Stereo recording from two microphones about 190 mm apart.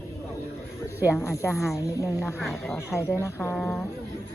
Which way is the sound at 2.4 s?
Centre (ahead or behind).